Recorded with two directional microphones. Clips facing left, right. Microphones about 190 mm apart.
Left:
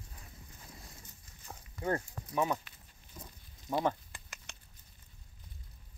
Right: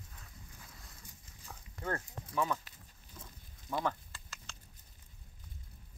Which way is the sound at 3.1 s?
15° left (ahead or behind).